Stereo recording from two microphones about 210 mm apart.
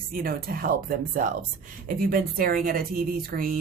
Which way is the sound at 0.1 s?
45° right (ahead or behind).